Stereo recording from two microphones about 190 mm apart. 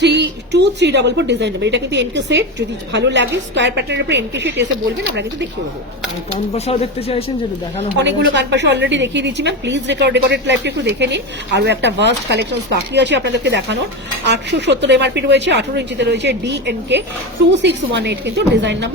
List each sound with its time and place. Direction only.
0.0 s a woman's voice: 65° right (ahead or behind)
6.5 s speech: 30° left (ahead or behind)
7.9 s a woman's voice: 65° right (ahead or behind)